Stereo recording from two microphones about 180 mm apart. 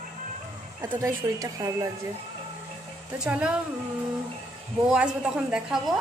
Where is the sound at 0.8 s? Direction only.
20° right (ahead or behind).